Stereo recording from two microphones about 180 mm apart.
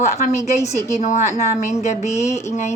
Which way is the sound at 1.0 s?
40° left (ahead or behind).